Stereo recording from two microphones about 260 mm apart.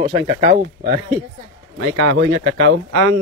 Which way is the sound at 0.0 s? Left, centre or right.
Right.